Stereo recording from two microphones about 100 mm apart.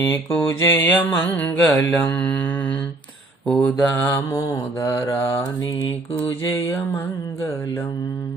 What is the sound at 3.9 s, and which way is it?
Mantra, 20° left (ahead or behind).